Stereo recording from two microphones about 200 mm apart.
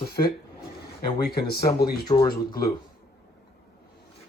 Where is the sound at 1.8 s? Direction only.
25° left (ahead or behind).